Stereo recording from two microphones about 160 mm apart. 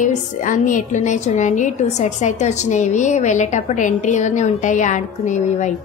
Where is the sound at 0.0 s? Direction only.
50° left (ahead or behind).